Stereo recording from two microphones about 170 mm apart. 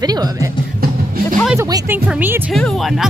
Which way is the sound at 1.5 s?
20° right (ahead or behind).